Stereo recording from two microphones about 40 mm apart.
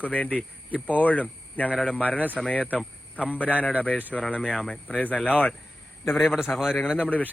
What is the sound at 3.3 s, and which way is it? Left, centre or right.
Speech, left.